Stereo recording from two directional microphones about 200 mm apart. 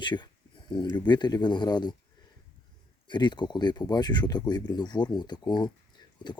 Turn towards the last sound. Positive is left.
turn(degrees=20)  # may be behind; listen again after turning